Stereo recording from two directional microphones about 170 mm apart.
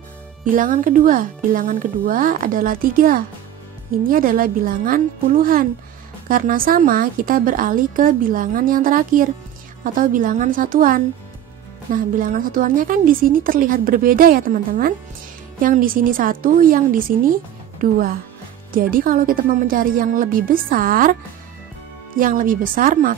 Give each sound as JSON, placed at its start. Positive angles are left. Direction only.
{"t": 0.6, "sound": "a woman's voice", "side_deg": -50}